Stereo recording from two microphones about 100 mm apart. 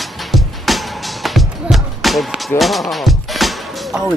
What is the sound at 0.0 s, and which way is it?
Music, centre (ahead or behind).